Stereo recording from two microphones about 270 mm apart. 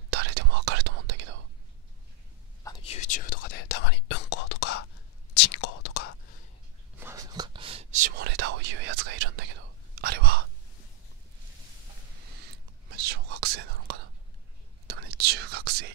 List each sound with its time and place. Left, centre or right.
0.1 s whispering: right
2.6 s whispering: centre; by 6.1 s left
7.0 s whispering: centre; by 10.4 s right
12.9 s whispering: right